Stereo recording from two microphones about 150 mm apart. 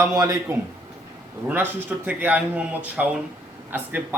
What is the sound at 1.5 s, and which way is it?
Speech, 10° right (ahead or behind).